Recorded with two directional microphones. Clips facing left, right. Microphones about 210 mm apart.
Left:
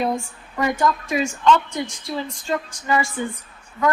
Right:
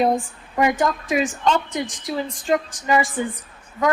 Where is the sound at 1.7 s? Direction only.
15° right (ahead or behind).